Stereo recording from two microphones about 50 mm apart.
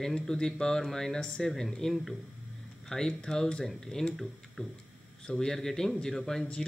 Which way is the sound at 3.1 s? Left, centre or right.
Centre.